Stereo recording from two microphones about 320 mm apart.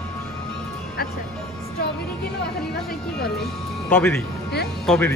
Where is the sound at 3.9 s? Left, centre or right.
Centre.